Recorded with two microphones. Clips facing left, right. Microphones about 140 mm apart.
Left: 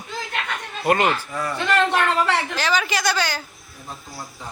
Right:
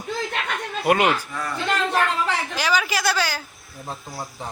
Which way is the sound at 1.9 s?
75° left (ahead or behind).